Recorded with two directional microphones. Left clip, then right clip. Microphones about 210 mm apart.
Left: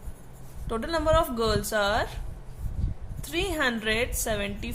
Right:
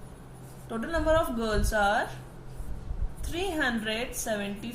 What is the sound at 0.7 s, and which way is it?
A woman's voice, 50° left (ahead or behind).